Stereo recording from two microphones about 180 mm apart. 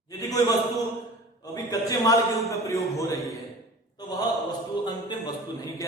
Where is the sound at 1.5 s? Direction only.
20° left (ahead or behind).